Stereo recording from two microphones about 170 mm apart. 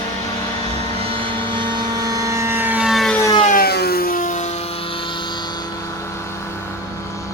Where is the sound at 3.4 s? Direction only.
55° left (ahead or behind); by 5.4 s 30° left (ahead or behind).